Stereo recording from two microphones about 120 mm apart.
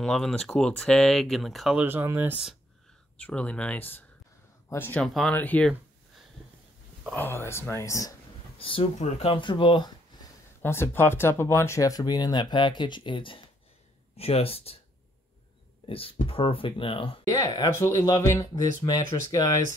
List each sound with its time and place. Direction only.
0.0 s speech: 5° left (ahead or behind)
1.8 s speech: 15° right (ahead or behind)
3.2 s speech: 10° left (ahead or behind)
5.0 s speech: 5° left (ahead or behind)
5.3 s speech: 15° left (ahead or behind)
7.2 s speech: 20° left (ahead or behind)
8.5 s speech: 45° left (ahead or behind)
8.9 s speech: 70° left (ahead or behind)
9.3 s speech: 45° left (ahead or behind)
10.6 s speech: 20° left (ahead or behind); by 14.8 s 55° left (ahead or behind)
15.9 s speech: 50° left (ahead or behind)
17.3 s speech: 30° left (ahead or behind)